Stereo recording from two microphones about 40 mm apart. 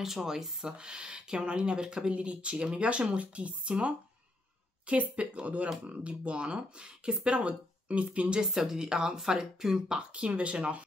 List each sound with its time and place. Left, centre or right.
0.0 s speech: centre
0.7 s speech: right
8.5 s speech: centre
9.9 s speech: right